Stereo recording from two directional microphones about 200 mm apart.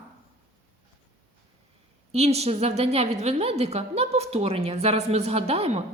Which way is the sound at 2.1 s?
30° right (ahead or behind).